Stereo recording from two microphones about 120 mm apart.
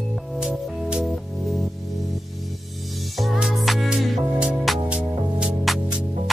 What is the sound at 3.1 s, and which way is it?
Music, centre (ahead or behind).